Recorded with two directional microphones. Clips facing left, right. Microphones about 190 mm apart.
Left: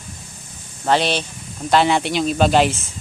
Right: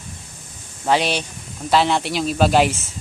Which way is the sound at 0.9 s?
10° right (ahead or behind).